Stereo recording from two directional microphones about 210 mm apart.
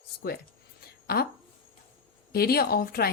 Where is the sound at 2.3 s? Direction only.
45° left (ahead or behind).